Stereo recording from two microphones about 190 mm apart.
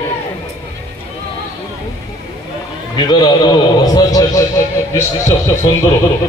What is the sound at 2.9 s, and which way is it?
A man's voice, 25° left (ahead or behind).